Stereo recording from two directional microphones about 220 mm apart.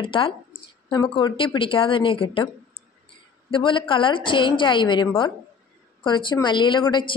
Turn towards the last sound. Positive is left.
turn(degrees=20)  # may be behind; listen again after turning